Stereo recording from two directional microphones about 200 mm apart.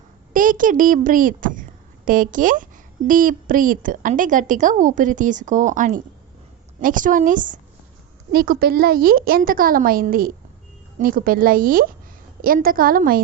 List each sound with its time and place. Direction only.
0.3 s a woman's voice: 40° right (ahead or behind)